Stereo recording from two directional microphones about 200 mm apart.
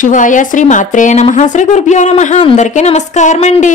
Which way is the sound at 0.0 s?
40° left (ahead or behind).